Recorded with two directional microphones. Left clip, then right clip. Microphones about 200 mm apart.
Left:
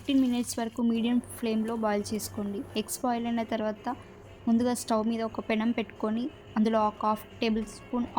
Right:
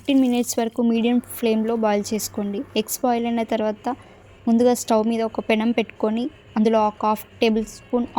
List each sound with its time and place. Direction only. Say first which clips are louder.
0.0 s speech: right 8 dB; 30° right (ahead or behind)